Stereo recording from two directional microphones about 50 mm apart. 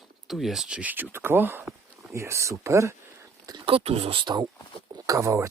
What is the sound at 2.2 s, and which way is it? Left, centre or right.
Speech, right.